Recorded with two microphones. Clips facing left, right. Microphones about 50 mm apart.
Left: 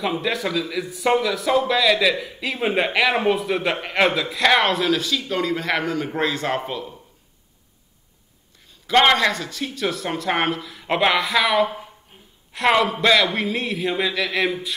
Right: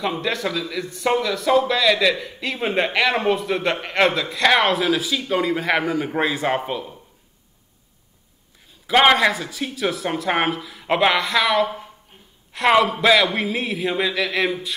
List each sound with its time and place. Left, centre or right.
0.0 s a man's voice: centre
8.8 s a man's voice: centre